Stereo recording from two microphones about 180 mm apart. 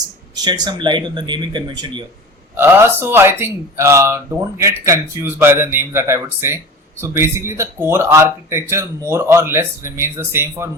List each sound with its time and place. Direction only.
0.3 s speech: 25° right (ahead or behind)
2.6 s speech: 10° right (ahead or behind)